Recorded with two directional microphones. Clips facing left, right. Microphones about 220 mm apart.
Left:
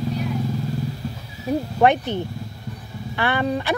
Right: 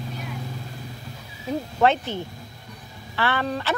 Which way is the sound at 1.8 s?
15° left (ahead or behind).